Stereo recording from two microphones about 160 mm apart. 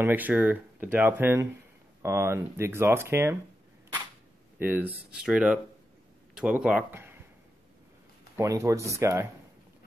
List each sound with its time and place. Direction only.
0.0 s speech: 10° right (ahead or behind)
4.6 s speech: 10° right (ahead or behind)
6.9 s a sound: 15° right (ahead or behind)
8.4 s speech: 20° right (ahead or behind)